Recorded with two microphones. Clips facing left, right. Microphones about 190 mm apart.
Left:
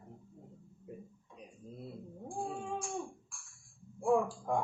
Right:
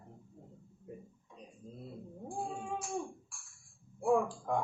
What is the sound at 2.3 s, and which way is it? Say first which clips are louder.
Cat: left 1 dB; centre (ahead or behind).